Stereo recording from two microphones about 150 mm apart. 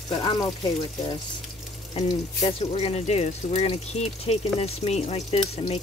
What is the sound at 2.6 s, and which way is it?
Speech, 45° left (ahead or behind).